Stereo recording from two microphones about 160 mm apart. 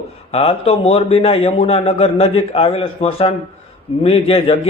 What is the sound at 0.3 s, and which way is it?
A man's voice, 40° left (ahead or behind).